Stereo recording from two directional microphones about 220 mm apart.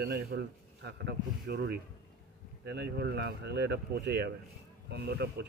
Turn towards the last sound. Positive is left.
turn(degrees=-50)  # may be behind; listen again after turning